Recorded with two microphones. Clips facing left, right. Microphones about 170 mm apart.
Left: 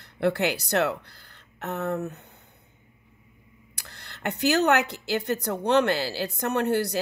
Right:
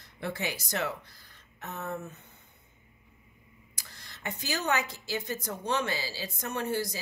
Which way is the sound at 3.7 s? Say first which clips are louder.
Left 5 dB; 65° left (ahead or behind).